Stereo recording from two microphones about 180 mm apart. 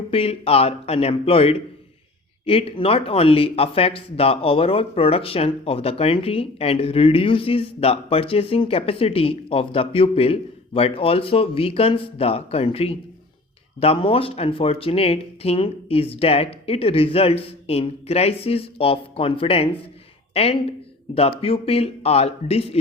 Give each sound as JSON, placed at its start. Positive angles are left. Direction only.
{"t": 0.1, "sound": "speech", "side_deg": 35}